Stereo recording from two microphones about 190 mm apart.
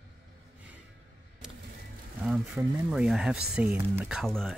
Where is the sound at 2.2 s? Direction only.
5° right (ahead or behind).